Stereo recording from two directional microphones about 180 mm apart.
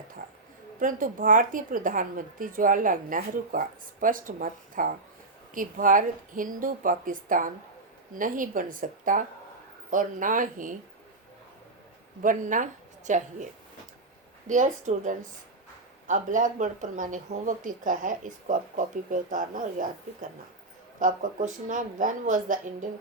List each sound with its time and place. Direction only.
0.2 s a woman's voice: 50° right (ahead or behind)
12.2 s a woman's voice: 45° right (ahead or behind)
21.0 s a woman's voice: 45° right (ahead or behind)